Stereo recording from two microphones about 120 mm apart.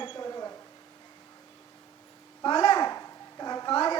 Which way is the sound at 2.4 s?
40° left (ahead or behind).